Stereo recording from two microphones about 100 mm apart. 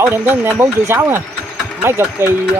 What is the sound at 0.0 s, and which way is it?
Speech, 25° right (ahead or behind).